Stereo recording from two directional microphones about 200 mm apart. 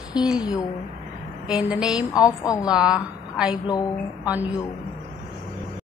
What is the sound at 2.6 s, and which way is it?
Speech, 5° right (ahead or behind).